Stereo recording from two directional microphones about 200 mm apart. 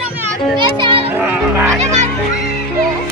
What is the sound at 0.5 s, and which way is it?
Children playing, 25° right (ahead or behind).